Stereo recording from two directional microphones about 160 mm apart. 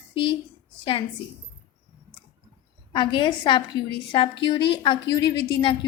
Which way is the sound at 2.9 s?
30° left (ahead or behind).